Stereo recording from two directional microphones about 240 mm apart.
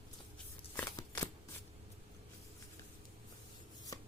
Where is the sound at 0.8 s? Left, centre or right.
Centre.